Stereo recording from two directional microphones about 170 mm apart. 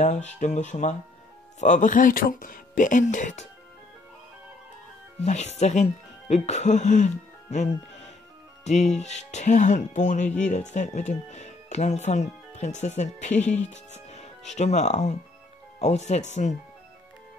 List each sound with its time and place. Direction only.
0.0 s speech: 45° left (ahead or behind)
5.2 s speech: 40° left (ahead or behind)